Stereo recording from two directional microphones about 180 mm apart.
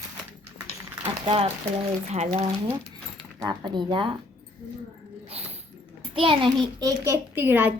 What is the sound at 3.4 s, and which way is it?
Speech, 25° right (ahead or behind).